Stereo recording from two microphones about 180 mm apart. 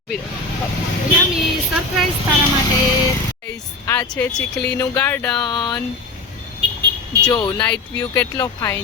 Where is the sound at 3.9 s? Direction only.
10° left (ahead or behind).